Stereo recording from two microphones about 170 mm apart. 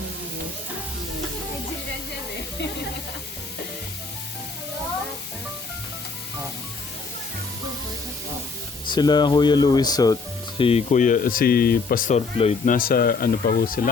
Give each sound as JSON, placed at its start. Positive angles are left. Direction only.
{"t": 8.9, "sound": "speech", "side_deg": 25}
{"t": 10.6, "sound": "speech", "side_deg": 35}
{"t": 12.1, "sound": "speech", "side_deg": 40}
{"t": 12.7, "sound": "speech", "side_deg": 60}